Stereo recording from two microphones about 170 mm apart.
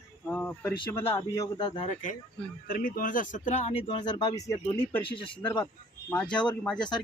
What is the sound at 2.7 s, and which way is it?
Speech, 55° left (ahead or behind).